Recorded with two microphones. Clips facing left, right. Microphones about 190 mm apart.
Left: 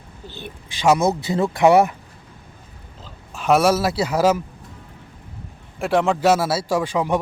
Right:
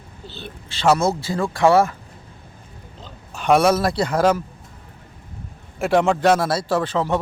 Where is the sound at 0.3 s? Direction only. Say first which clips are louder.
Even; 15° left (ahead or behind).